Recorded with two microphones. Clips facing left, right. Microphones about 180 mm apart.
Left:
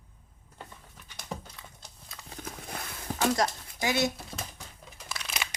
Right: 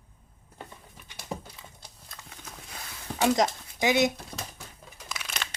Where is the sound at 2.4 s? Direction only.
55° left (ahead or behind).